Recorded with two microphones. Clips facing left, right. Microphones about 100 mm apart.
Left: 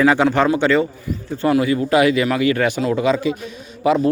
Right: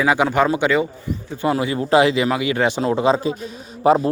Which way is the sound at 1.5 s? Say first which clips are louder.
Left 1 dB; 30° right (ahead or behind).